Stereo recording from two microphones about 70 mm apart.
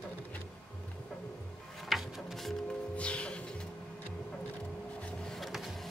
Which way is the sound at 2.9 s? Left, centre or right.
Centre.